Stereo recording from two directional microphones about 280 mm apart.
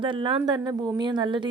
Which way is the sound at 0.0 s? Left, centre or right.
Centre.